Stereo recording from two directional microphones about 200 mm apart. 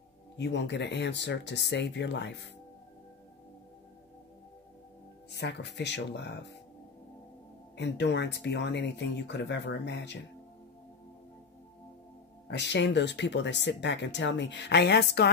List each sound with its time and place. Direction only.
0.4 s speech: 60° left (ahead or behind)
5.3 s speech: 60° left (ahead or behind)
7.7 s speech: 60° left (ahead or behind)
12.4 s speech: 60° left (ahead or behind)